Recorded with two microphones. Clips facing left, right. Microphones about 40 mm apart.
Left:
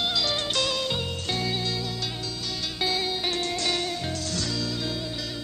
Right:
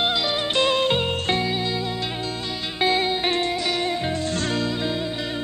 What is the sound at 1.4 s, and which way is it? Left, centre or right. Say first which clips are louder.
Music: right 4 dB; right.